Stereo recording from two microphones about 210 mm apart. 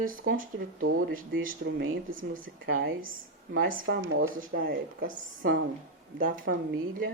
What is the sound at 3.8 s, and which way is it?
A woman's voice, 55° right (ahead or behind).